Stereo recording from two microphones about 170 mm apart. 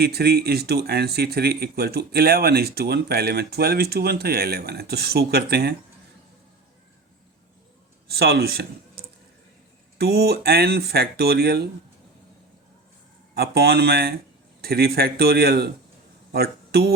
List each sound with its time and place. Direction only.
0.0 s speech: 70° right (ahead or behind)
8.1 s speech: 70° right (ahead or behind)
13.3 s speech: 70° right (ahead or behind)
16.3 s a sound: 65° right (ahead or behind)